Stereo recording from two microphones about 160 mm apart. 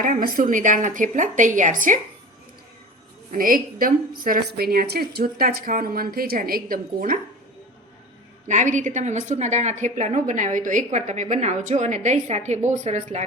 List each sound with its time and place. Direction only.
0.0 s a woman's voice: 60° right (ahead or behind)
3.3 s a woman's voice: 60° right (ahead or behind)
8.4 s a woman's voice: 50° right (ahead or behind)